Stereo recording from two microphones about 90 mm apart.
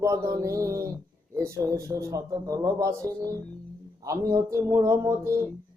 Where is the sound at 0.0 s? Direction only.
35° right (ahead or behind).